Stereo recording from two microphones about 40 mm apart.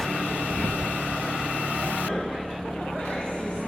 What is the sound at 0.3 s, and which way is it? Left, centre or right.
Vehicle, right.